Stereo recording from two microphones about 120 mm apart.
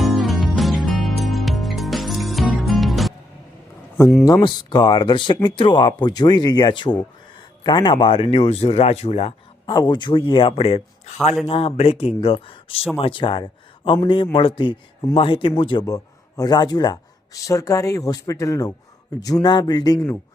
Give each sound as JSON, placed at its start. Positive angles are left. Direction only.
{"t": 0.0, "sound": "music", "side_deg": 0}
{"t": 4.3, "sound": "speech", "side_deg": 35}
{"t": 9.6, "sound": "a man's voice", "side_deg": 35}